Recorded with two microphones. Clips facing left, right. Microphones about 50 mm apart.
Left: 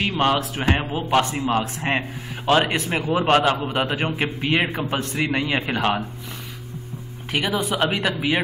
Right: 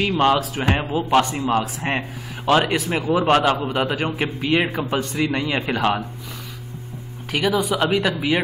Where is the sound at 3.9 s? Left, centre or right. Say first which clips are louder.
Even; centre.